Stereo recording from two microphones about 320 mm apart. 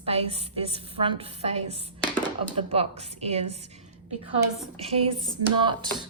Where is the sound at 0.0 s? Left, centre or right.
Centre.